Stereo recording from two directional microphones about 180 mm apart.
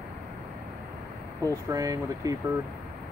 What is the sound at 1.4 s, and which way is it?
Speech, 20° right (ahead or behind).